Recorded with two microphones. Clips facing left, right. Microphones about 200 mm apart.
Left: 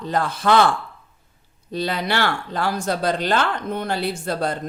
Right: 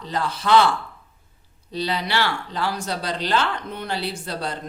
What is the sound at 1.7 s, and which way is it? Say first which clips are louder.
Speech: left 2 dB; 50° left (ahead or behind).